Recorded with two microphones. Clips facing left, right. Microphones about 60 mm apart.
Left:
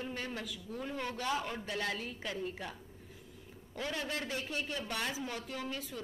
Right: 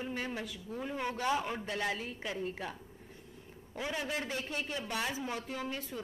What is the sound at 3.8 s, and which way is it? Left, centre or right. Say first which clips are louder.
A woman's voice: right 1 dB; centre.